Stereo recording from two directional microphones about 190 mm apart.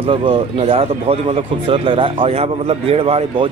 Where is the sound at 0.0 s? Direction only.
30° right (ahead or behind).